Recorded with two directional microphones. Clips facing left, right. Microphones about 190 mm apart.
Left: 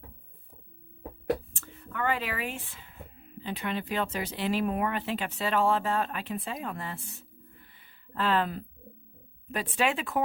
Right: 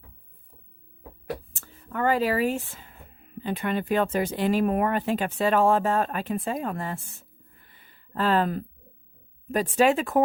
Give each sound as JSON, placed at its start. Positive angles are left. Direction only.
{"t": 1.5, "sound": "speech", "side_deg": -40}